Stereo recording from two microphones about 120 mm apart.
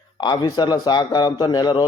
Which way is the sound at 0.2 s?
35° left (ahead or behind).